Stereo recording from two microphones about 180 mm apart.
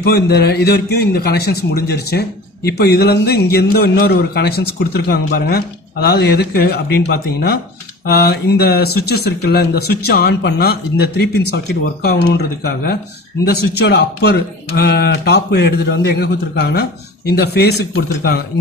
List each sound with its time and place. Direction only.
0.0 s a man's voice: 60° left (ahead or behind)